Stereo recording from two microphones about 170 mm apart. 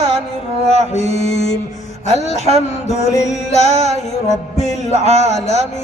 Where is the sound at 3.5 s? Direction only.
40° left (ahead or behind).